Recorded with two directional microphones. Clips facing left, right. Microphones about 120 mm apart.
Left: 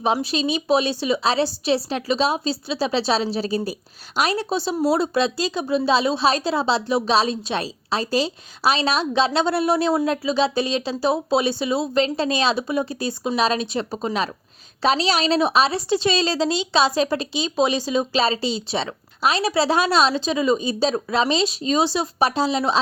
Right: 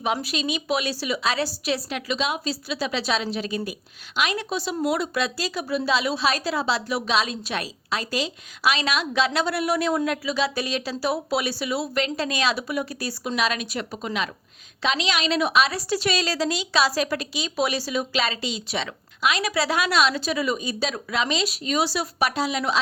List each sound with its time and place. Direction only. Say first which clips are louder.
0.0 s a woman's voice: left 5 dB; 30° left (ahead or behind)